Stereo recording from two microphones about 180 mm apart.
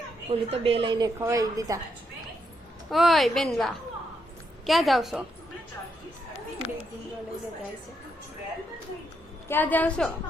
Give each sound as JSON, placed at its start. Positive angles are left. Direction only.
{"t": 0.3, "sound": "a woman's voice", "side_deg": -35}
{"t": 2.9, "sound": "a woman's voice", "side_deg": 0}
{"t": 9.5, "sound": "a woman's voice", "side_deg": 10}